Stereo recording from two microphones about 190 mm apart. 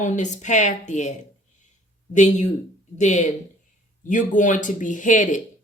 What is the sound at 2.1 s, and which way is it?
Speech, 40° left (ahead or behind).